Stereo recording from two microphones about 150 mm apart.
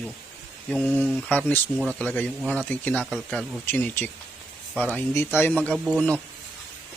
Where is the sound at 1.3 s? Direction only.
10° left (ahead or behind).